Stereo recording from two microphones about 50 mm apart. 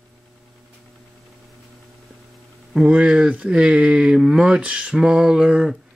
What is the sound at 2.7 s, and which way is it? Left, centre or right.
Speech, centre.